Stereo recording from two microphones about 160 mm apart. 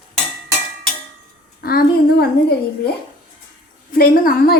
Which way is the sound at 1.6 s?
70° left (ahead or behind).